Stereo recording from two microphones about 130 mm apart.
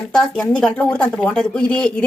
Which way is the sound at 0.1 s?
5° left (ahead or behind).